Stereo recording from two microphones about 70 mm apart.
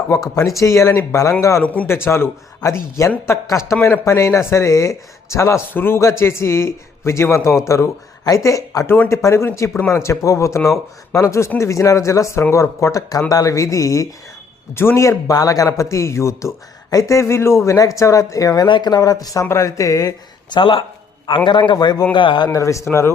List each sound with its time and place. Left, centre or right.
0.1 s speech: left
1.6 s speech: left
1.9 s a man's voice: left
2.6 s speech: left
3.0 s a man's voice: left
14.8 s speech: left
17.7 s speech: left
19.5 s speech: left
21.2 s a man's voice: left
22.5 s speech: left